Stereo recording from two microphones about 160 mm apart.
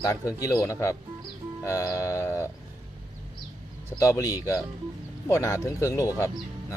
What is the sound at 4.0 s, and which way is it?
Speech, 20° left (ahead or behind).